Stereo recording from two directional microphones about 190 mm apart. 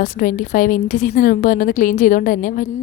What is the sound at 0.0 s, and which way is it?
A woman's voice, 45° left (ahead or behind).